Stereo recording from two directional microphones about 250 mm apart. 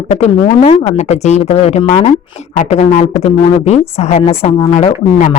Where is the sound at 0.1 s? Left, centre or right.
Left.